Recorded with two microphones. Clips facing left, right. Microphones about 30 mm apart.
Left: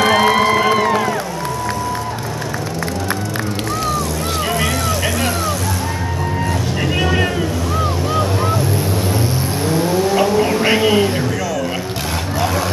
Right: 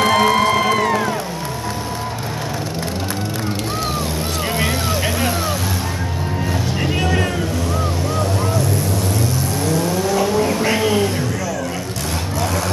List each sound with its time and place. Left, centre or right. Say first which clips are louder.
0.0 s music: left 1 dB; centre
6.8 s vehicle: left 3 dB; centre
9.7 s vehicle: left 3 dB; left
10.2 s vehicle: left 2 dB; centre
10.6 s music: left 3 dB; left